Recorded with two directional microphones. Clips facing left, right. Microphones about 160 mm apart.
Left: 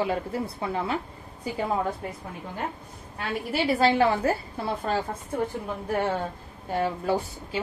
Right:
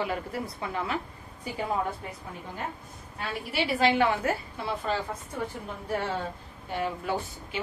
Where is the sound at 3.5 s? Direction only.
35° left (ahead or behind).